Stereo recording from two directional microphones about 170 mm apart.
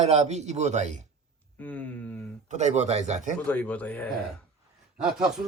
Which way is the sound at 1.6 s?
10° left (ahead or behind).